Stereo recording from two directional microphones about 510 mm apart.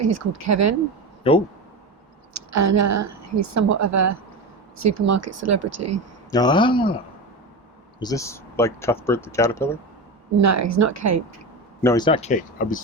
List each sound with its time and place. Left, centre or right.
0.0 s speech: right
1.2 s speech: centre
2.3 s a woman's voice: right
6.3 s speech: centre
7.9 s speech: centre
10.4 s speech: right
11.8 s speech: centre